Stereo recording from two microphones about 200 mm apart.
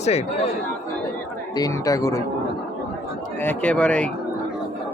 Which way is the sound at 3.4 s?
5° left (ahead or behind).